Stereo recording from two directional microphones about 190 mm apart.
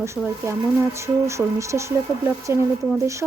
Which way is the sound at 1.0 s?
15° right (ahead or behind).